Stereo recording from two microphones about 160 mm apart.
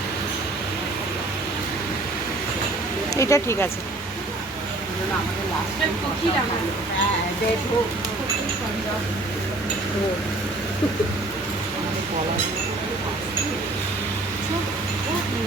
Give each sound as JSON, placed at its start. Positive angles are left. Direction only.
{"t": 3.2, "sound": "speech", "side_deg": 20}